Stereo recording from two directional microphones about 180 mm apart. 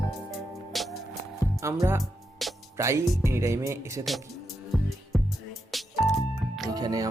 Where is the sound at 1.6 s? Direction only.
15° right (ahead or behind).